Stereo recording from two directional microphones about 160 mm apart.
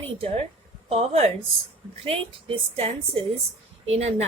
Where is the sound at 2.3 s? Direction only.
35° right (ahead or behind).